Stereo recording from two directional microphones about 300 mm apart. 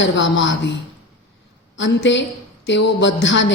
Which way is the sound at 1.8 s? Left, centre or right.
Left.